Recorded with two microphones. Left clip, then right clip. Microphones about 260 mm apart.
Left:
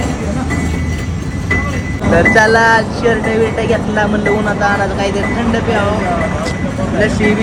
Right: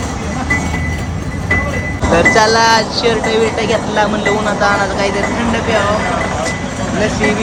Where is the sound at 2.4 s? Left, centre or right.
Centre.